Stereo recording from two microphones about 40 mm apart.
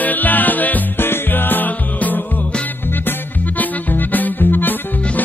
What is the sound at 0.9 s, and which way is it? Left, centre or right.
Music, left.